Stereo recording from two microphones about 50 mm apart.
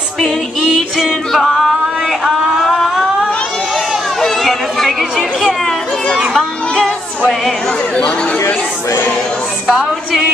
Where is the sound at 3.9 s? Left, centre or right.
Centre.